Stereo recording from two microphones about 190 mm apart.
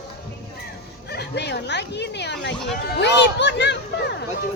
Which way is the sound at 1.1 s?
60° left (ahead or behind).